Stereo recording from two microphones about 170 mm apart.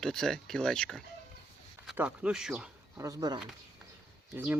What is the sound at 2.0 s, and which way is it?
Speech, 5° right (ahead or behind).